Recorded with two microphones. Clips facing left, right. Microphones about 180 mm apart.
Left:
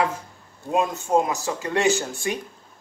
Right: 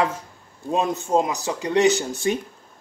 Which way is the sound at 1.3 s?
15° right (ahead or behind).